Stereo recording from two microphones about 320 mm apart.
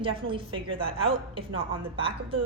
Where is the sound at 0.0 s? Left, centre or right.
Centre.